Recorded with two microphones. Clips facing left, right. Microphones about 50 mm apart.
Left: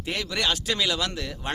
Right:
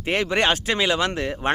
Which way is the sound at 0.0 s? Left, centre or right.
Right.